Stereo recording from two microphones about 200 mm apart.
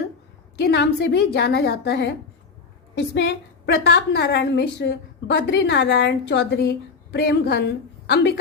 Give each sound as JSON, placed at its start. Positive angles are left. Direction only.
{"t": 0.6, "sound": "a woman's voice", "side_deg": 55}
{"t": 3.7, "sound": "a woman's voice", "side_deg": 55}